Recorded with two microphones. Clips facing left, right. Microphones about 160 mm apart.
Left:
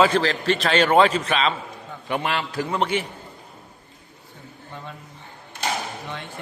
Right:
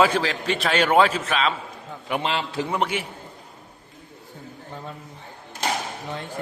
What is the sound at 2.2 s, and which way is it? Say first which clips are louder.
Speech: right 1 dB; 25° right (ahead or behind).